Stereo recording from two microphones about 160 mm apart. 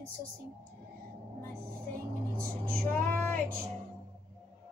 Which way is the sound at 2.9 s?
10° left (ahead or behind).